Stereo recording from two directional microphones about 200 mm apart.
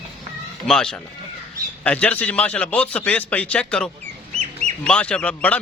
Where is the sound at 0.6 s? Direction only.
Centre (ahead or behind).